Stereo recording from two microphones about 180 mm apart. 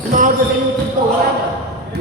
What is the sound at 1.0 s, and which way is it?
Speech, 50° right (ahead or behind).